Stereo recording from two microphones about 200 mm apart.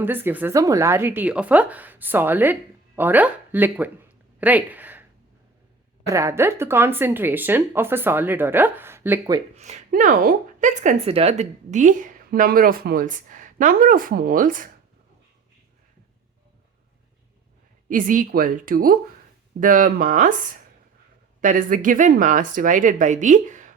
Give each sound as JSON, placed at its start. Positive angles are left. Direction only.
{"t": 0.0, "sound": "speech", "side_deg": -10}
{"t": 4.4, "sound": "a sound", "side_deg": -10}
{"t": 6.1, "sound": "speech", "side_deg": -15}
{"t": 9.6, "sound": "speech", "side_deg": -35}
{"t": 17.8, "sound": "speech", "side_deg": -40}
{"t": 21.4, "sound": "speech", "side_deg": -40}